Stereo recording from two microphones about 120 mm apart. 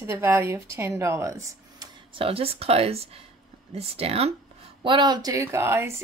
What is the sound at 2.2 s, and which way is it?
Speech, 50° right (ahead or behind).